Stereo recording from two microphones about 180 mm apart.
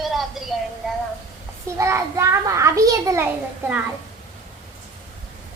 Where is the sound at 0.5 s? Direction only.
Centre (ahead or behind).